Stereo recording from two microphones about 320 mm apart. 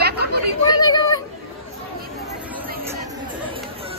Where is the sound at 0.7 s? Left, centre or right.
Centre.